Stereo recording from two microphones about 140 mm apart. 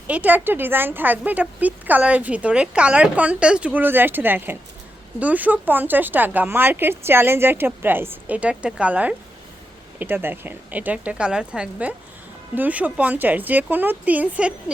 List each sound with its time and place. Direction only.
0.1 s a woman's voice: 10° right (ahead or behind)